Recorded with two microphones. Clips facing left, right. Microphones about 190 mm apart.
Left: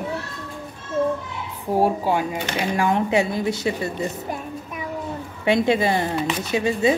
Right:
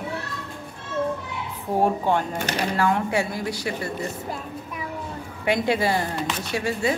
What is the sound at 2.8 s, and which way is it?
A woman's voice, 20° left (ahead or behind).